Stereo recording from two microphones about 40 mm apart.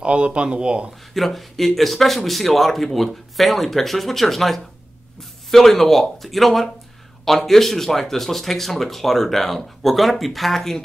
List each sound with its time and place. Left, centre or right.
0.0 s speech: right
1.1 s speech: centre